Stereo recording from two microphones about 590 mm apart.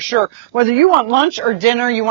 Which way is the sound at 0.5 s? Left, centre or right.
Right.